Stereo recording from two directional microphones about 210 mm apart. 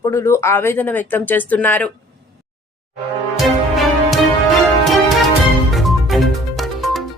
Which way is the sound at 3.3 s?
Centre (ahead or behind).